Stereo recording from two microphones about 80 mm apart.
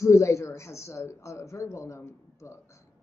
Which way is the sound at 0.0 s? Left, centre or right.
Left.